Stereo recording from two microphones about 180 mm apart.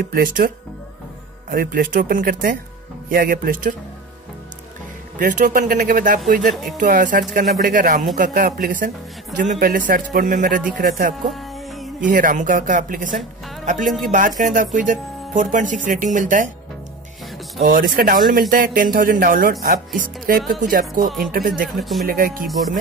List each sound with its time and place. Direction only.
0.1 s speech: 55° right (ahead or behind)
1.5 s speech: 55° right (ahead or behind)
5.2 s speech: 45° right (ahead or behind)
6.5 s speech: centre (ahead or behind)
6.8 s speech: 45° right (ahead or behind)
11.2 s music: centre (ahead or behind)
12.1 s speech: 50° right (ahead or behind)
17.6 s speech: 55° right (ahead or behind)
21.7 s speech: centre (ahead or behind)
22.0 s speech: 50° right (ahead or behind)